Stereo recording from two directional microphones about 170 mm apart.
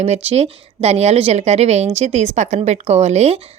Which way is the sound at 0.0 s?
40° right (ahead or behind).